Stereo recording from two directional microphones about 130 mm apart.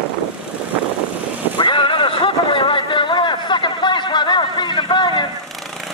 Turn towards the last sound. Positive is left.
turn(degrees=35)  # may be behind; listen again after turning